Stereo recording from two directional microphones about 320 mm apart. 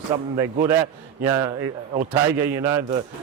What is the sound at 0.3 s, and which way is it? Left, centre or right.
A man's voice, centre.